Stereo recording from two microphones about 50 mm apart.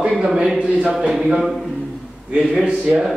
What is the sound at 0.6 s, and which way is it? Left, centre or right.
Speech, right.